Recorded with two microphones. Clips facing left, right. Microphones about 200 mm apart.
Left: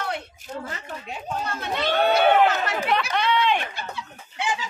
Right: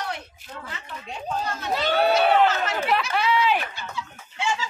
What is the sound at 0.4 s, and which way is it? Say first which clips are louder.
Speech: left 5 dB; 45° left (ahead or behind).